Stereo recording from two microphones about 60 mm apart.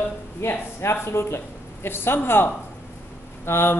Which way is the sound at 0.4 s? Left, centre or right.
Left.